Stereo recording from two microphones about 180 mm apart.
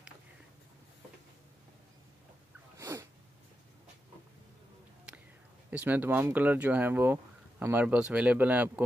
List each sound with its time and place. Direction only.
2.8 s sneeze: 15° right (ahead or behind)
5.7 s speech: 10° right (ahead or behind)